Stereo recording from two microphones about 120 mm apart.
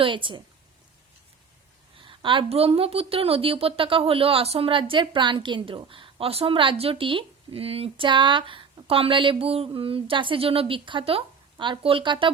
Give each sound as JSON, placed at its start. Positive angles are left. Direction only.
{"t": 0.0, "sound": "a woman's voice", "side_deg": -45}
{"t": 2.0, "sound": "a woman's voice", "side_deg": -45}